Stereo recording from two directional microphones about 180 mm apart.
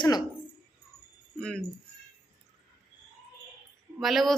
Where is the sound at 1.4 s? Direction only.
5° left (ahead or behind).